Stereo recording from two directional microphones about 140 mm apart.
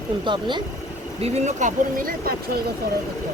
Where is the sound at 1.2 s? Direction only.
60° right (ahead or behind); by 2.3 s 75° right (ahead or behind).